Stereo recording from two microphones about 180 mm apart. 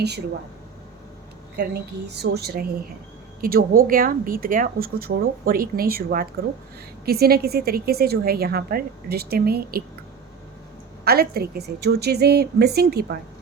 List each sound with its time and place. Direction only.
1.5 s a woman's voice: 65° right (ahead or behind)
11.0 s a woman's voice: 60° right (ahead or behind)